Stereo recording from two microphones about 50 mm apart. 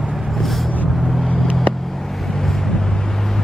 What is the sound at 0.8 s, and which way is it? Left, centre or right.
Vehicle, centre.